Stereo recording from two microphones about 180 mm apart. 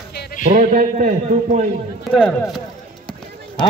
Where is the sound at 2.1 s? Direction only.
5° left (ahead or behind).